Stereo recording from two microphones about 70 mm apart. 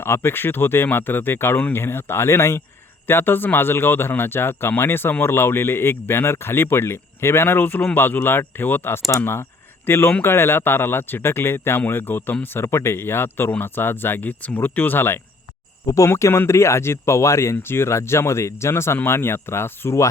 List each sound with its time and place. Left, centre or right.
0.0 s speech: left
12.6 s speech: left
16.0 s speech: left